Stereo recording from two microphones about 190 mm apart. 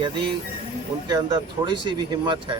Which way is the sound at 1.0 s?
20° right (ahead or behind).